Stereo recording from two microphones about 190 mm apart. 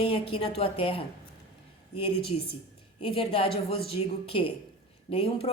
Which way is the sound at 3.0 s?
30° left (ahead or behind).